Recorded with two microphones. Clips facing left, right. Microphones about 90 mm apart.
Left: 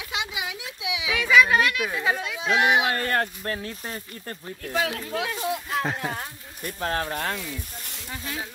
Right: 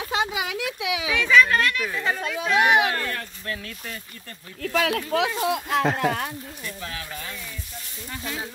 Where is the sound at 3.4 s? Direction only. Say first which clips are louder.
Left 2 dB; 35° left (ahead or behind).